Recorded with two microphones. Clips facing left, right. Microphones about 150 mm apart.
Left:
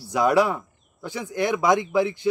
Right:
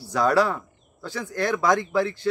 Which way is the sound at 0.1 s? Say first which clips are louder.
Left 1 dB; 15° left (ahead or behind).